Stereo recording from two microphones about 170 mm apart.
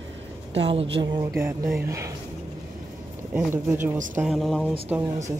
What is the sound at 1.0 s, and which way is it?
Speech, 20° right (ahead or behind).